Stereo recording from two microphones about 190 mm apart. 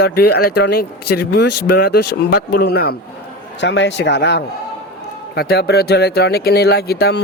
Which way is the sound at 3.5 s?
70° left (ahead or behind).